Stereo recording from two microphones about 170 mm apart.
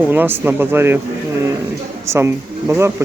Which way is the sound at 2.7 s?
15° right (ahead or behind).